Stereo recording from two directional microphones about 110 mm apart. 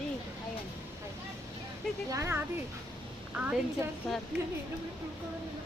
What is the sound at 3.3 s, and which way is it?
Speech, 10° right (ahead or behind).